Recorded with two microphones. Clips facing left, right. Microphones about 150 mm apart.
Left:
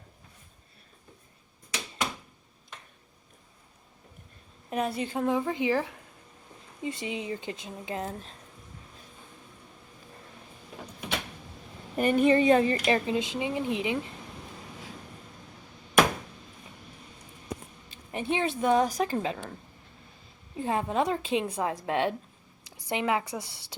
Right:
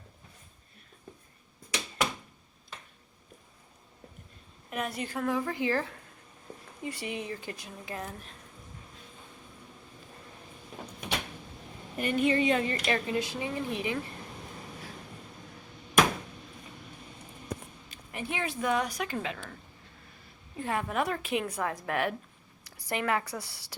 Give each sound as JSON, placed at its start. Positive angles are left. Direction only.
{"t": 4.7, "sound": "a woman's voice", "side_deg": 30}
{"t": 11.9, "sound": "speech", "side_deg": 45}
{"t": 12.8, "sound": "a woman's voice", "side_deg": 25}
{"t": 17.9, "sound": "a woman's voice", "side_deg": 25}
{"t": 20.6, "sound": "a woman's voice", "side_deg": 25}